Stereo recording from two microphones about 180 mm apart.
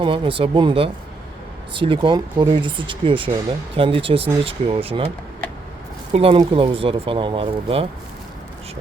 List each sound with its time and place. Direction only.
0.0 s speech: 30° right (ahead or behind)
6.1 s speech: 30° right (ahead or behind)